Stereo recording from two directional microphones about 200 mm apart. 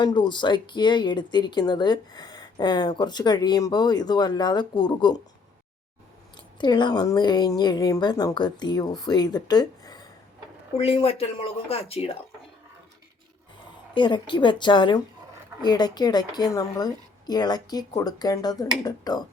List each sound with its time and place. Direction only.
0.0 s speech: 20° left (ahead or behind)
6.3 s speech: 20° left (ahead or behind)
13.9 s speech: 25° left (ahead or behind)